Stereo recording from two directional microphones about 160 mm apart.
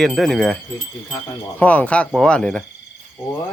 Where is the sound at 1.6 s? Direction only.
10° left (ahead or behind).